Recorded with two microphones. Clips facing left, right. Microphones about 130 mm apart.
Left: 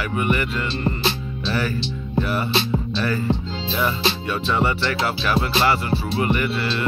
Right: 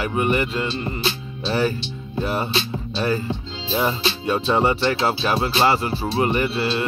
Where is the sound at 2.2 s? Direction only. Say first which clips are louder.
Right 1 dB; 25° right (ahead or behind).